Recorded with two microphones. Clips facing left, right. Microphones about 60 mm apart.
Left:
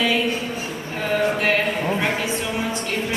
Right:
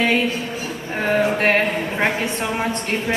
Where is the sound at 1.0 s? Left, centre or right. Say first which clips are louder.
Right 3 dB; right.